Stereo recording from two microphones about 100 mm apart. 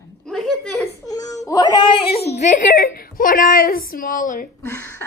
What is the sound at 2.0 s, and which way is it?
Speech, 85° left.